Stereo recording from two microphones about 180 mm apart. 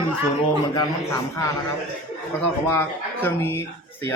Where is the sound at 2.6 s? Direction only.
10° left (ahead or behind).